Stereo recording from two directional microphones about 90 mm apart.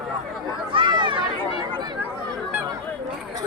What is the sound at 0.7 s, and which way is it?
Run, 60° right (ahead or behind).